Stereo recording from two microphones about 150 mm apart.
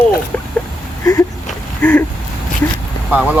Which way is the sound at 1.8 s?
10° left (ahead or behind).